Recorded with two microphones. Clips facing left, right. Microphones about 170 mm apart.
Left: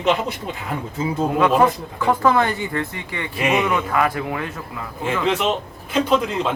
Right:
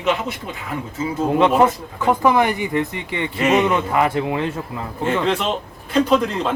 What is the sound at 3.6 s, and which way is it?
Speech, 25° right (ahead or behind).